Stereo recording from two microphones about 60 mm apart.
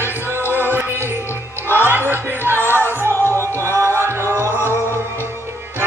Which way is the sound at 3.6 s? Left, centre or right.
Right.